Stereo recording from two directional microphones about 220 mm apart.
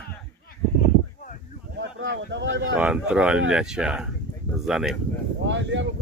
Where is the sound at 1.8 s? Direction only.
60° right (ahead or behind).